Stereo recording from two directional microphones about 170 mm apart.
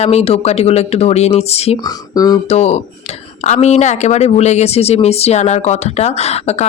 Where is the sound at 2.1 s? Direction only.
20° left (ahead or behind).